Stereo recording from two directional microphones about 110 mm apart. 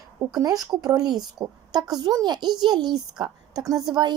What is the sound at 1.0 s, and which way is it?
Speech, 5° right (ahead or behind).